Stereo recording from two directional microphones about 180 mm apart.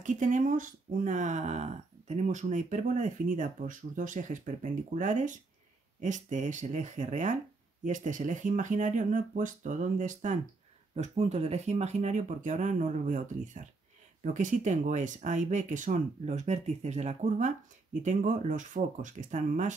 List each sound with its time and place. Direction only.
0.0 s speech: 45° right (ahead or behind)